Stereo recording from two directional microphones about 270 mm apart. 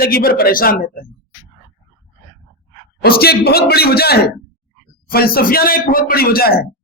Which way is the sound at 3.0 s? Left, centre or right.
Left.